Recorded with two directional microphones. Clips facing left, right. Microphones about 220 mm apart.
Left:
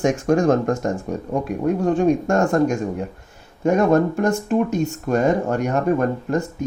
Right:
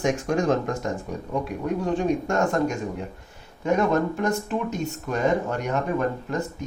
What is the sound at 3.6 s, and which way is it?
Speech, 50° left (ahead or behind).